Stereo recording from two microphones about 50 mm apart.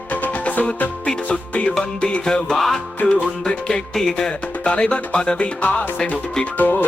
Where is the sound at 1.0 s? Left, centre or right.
Left.